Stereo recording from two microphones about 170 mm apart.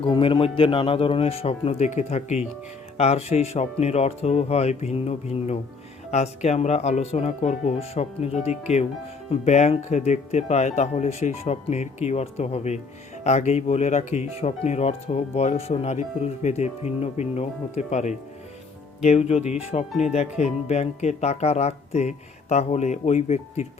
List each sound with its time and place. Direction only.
0.0 s speech: 30° left (ahead or behind)